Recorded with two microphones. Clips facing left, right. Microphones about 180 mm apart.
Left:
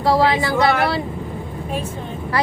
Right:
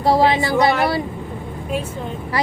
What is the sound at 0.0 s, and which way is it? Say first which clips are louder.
Speech: right 1 dB; 20° right (ahead or behind).